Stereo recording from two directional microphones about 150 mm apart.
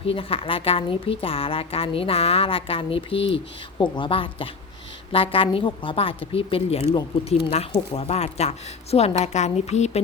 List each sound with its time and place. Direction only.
0.0 s a woman's voice: 40° left (ahead or behind)